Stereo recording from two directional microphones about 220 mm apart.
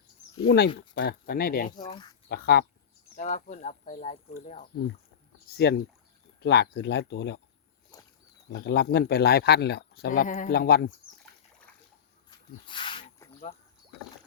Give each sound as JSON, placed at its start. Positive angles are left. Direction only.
{"t": 0.4, "sound": "speech", "side_deg": 50}
{"t": 1.7, "sound": "speech", "side_deg": 20}
{"t": 2.3, "sound": "speech", "side_deg": 45}
{"t": 3.2, "sound": "speech", "side_deg": 35}
{"t": 5.5, "sound": "speech", "side_deg": 45}
{"t": 7.9, "sound": "wild animals", "side_deg": 15}
{"t": 8.4, "sound": "speech", "side_deg": 50}
{"t": 12.3, "sound": "snake", "side_deg": 20}